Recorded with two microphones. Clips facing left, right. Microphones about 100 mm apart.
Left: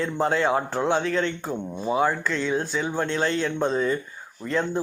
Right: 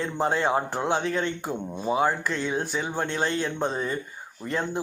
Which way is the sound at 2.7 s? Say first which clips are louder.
Left 2 dB; 30° right (ahead or behind).